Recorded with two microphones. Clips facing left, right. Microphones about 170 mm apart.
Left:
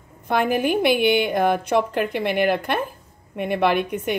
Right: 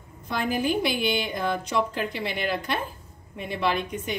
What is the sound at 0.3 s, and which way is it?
Speech, 60° left (ahead or behind).